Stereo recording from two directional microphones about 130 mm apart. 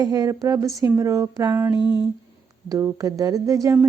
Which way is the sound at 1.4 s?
15° right (ahead or behind).